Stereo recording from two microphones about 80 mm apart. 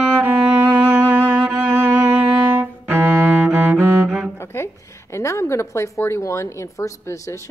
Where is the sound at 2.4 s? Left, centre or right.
Right.